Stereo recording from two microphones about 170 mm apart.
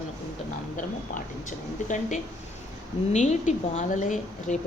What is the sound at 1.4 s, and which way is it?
A woman's voice, 45° left (ahead or behind).